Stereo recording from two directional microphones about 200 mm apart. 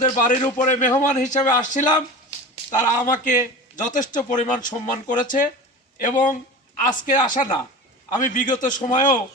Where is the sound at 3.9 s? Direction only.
40° left (ahead or behind).